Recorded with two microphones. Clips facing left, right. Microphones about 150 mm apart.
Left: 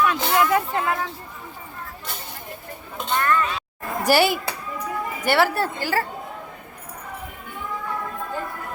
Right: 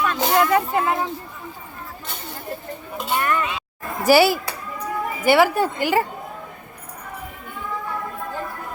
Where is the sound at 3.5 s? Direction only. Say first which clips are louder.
Left 1 dB; 5° right (ahead or behind).